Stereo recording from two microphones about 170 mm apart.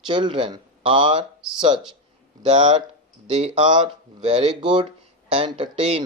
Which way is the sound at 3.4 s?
30° right (ahead or behind).